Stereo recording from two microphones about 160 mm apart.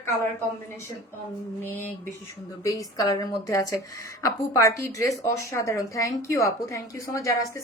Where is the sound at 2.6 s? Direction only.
20° left (ahead or behind).